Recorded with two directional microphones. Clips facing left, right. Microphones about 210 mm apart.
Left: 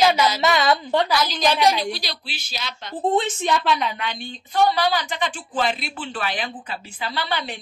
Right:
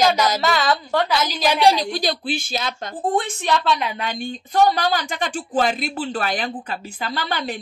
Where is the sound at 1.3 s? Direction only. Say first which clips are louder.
Even; 10° right (ahead or behind).